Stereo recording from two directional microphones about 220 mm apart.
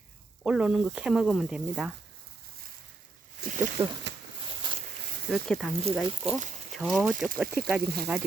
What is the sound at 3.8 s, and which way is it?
Speech, 10° right (ahead or behind).